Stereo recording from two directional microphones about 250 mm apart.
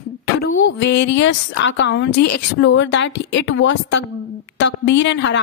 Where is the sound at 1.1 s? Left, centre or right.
Left.